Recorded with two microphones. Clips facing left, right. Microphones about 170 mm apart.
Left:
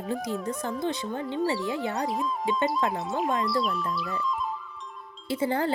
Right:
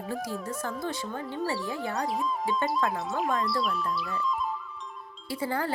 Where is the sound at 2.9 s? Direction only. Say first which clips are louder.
Left 1 dB; centre (ahead or behind).